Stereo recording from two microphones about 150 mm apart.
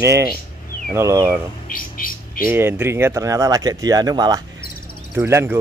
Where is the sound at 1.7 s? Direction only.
70° left (ahead or behind).